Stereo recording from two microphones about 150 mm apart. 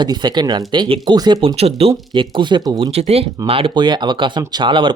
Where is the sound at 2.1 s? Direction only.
30° right (ahead or behind).